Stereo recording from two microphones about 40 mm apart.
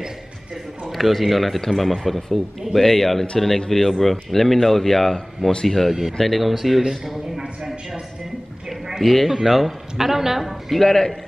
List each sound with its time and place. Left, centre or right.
0.8 s a man's voice: centre
7.3 s speech: centre
8.6 s a sound: centre
9.0 s a man's voice: centre
10.8 s speech: centre